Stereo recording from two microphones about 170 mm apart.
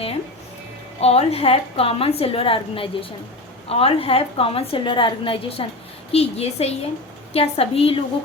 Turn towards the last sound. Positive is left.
turn(degrees=35)  # may be behind; listen again after turning